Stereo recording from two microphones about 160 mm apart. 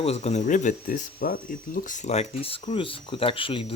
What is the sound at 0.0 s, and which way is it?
Speech, 40° left (ahead or behind).